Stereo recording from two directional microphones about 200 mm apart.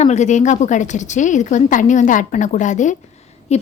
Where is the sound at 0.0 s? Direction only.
35° left (ahead or behind).